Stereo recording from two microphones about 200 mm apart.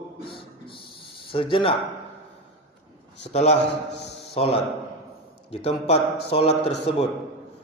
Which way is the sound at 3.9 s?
30° left (ahead or behind).